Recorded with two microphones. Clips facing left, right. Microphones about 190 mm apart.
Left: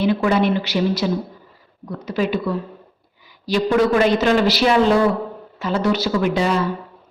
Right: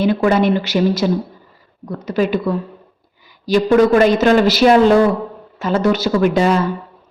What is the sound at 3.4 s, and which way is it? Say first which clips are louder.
A woman's voice: right 5 dB; 45° right (ahead or behind).